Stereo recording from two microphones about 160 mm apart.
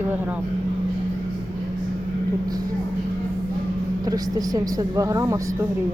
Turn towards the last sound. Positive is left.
turn(degrees=-20)  # may be behind; listen again after turning